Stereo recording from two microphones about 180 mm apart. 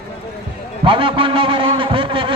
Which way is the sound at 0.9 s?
30° right (ahead or behind).